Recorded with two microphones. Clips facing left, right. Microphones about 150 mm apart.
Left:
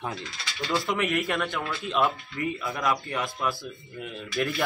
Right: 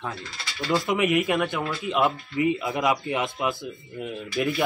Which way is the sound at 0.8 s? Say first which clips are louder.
Right 6 dB; 15° right (ahead or behind).